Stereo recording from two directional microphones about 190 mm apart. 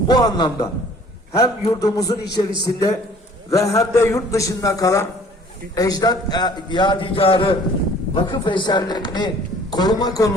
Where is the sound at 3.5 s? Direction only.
15° left (ahead or behind).